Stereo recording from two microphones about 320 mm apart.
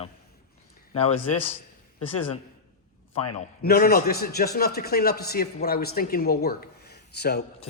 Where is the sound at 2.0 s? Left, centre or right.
Left.